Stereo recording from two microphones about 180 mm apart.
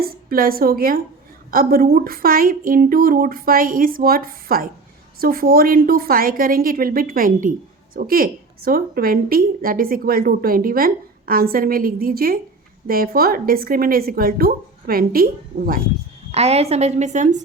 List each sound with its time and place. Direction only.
0.0 s a woman's voice: 55° right (ahead or behind)
16.3 s a woman's voice: 35° right (ahead or behind)